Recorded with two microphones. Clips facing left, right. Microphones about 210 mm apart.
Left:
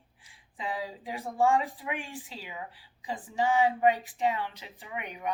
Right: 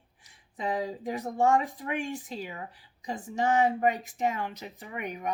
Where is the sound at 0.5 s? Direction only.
45° right (ahead or behind).